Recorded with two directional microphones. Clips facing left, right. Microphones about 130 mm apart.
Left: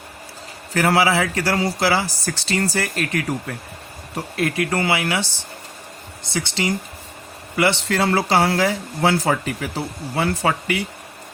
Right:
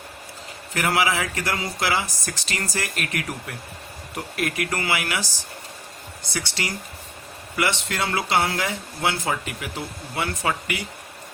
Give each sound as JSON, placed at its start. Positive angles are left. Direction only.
{"t": 0.7, "sound": "speech", "side_deg": 35}
{"t": 6.3, "sound": "speech", "side_deg": 25}